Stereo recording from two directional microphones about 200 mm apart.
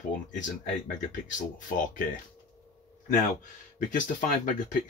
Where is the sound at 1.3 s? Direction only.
40° left (ahead or behind).